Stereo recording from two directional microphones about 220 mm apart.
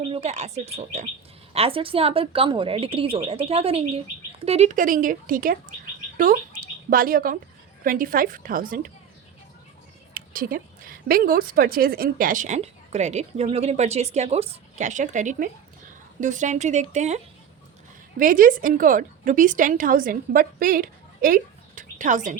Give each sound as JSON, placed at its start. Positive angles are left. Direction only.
{"t": 0.1, "sound": "a woman's voice", "side_deg": -30}
{"t": 6.9, "sound": "a woman's voice", "side_deg": -40}
{"t": 10.2, "sound": "a woman's voice", "side_deg": -40}
{"t": 18.2, "sound": "a woman's voice", "side_deg": -40}